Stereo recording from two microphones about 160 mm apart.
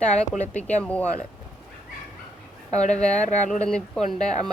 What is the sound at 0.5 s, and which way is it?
Speech, 10° left (ahead or behind).